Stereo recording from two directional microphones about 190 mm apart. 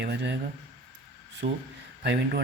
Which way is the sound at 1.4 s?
40° right (ahead or behind).